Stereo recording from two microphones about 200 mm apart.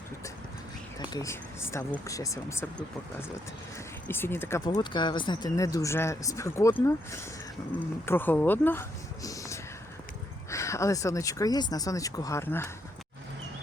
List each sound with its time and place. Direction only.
1.1 s speech: 15° left (ahead or behind)
4.8 s speech: 25° left (ahead or behind)